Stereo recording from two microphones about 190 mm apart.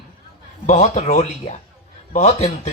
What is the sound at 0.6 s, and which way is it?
A man's voice, 35° left (ahead or behind).